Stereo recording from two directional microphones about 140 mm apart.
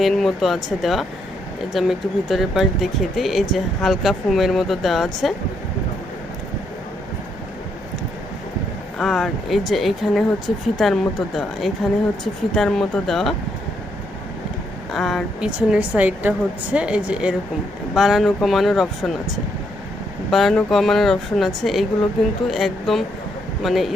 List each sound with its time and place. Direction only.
0.0 s speech: centre (ahead or behind)
9.0 s speech: centre (ahead or behind)
14.9 s a woman's voice: centre (ahead or behind)
20.3 s speech: centre (ahead or behind)